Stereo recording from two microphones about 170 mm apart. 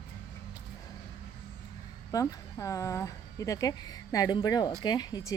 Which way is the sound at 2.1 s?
20° left (ahead or behind).